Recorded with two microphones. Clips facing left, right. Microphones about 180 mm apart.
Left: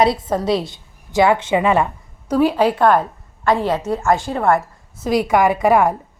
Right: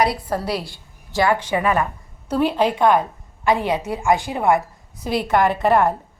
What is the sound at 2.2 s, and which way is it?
Speech, 10° left (ahead or behind).